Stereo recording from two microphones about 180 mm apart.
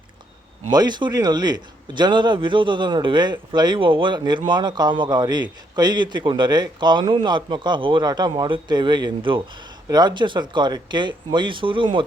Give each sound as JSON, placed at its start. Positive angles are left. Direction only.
{"t": 0.7, "sound": "a man's voice", "side_deg": -25}